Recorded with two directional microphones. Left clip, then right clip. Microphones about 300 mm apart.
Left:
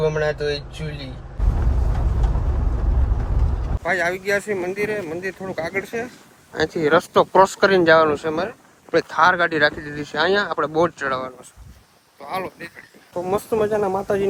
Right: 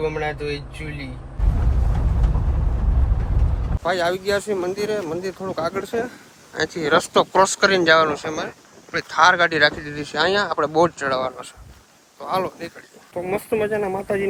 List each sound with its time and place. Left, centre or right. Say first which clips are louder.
0.3 s speech: left 4 dB; centre
3.8 s speech: even; centre
6.5 s speech: left 1 dB; centre
9.1 s speech: right 3 dB; centre
12.3 s speech: right 4 dB; centre
13.2 s speech: left 2 dB; centre